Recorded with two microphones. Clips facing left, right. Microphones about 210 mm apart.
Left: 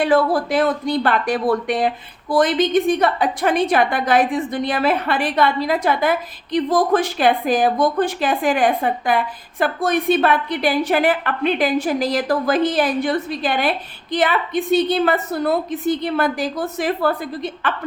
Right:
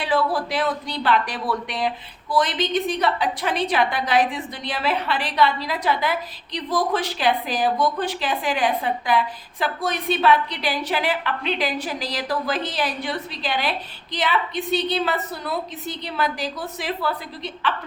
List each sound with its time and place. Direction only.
0.0 s a woman's voice: 50° left (ahead or behind)